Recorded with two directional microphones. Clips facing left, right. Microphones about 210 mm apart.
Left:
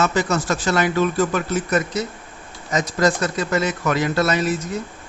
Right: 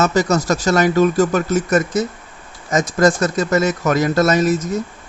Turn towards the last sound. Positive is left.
turn(degrees=-45)  # may be behind; listen again after turning